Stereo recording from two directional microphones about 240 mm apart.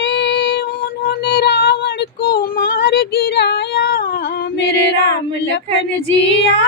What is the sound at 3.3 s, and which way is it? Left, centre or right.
Singing, left.